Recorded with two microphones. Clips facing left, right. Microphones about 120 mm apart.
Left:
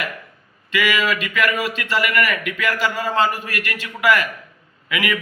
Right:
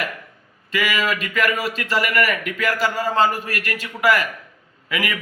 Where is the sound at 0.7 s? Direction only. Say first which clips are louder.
Left 2 dB; 40° right (ahead or behind).